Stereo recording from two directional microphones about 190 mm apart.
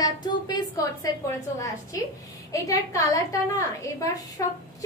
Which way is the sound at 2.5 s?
15° left (ahead or behind).